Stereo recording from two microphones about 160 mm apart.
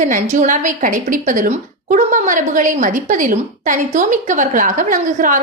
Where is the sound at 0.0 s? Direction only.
55° right (ahead or behind).